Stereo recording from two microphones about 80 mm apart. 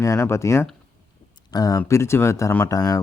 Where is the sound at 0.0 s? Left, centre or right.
Left.